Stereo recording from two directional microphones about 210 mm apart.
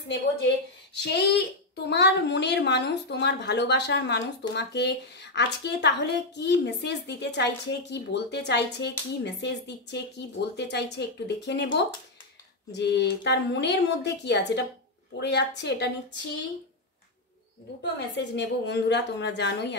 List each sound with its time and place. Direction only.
0.9 s a woman's voice: 50° left (ahead or behind)
17.9 s a woman's voice: 55° left (ahead or behind)